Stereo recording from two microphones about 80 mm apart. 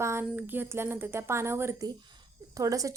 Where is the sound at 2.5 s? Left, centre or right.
Right.